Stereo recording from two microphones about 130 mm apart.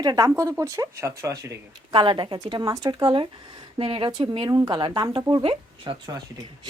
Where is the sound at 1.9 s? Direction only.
40° right (ahead or behind).